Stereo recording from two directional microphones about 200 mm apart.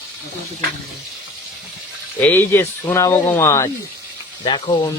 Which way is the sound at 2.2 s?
10° left (ahead or behind).